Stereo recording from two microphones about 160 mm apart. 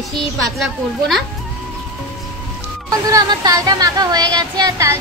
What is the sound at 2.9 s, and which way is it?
Speech, 20° right (ahead or behind).